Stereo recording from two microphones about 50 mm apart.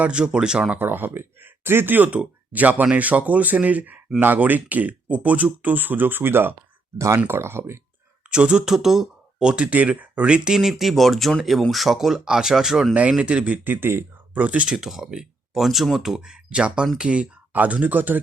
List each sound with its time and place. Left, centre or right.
0.0 s speech: right
0.8 s speech: right
2.0 s speech: right
4.2 s speech: right
8.3 s speech: centre
8.6 s speech: centre
9.4 s speech: centre
10.5 s speech: centre
12.9 s speech: right
13.7 s speech: right
14.3 s speech: right
14.7 s speech: centre; by 18.2 s right